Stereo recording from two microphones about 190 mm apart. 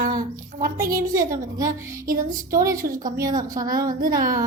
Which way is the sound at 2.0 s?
45° right (ahead or behind).